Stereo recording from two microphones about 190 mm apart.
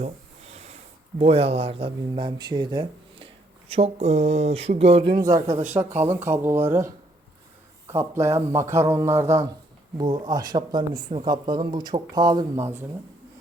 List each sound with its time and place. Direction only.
0.0 s a sound: 35° right (ahead or behind)
1.2 s speech: 30° right (ahead or behind)
3.7 s speech: 35° right (ahead or behind)
5.2 s a man's voice: 15° right (ahead or behind)